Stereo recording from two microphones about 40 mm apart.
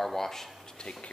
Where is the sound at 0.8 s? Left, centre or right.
Centre.